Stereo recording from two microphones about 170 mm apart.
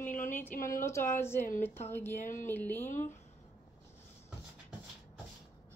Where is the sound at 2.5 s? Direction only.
10° left (ahead or behind).